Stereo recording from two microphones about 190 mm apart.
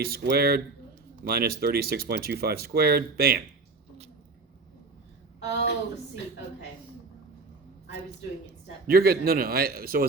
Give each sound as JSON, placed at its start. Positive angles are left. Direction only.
{"t": 0.0, "sound": "speech", "side_deg": -55}
{"t": 5.4, "sound": "a woman's voice", "side_deg": 75}
{"t": 8.9, "sound": "speech", "side_deg": -50}